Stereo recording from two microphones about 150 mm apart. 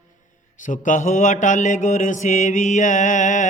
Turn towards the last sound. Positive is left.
turn(degrees=55)  # may be behind; listen again after turning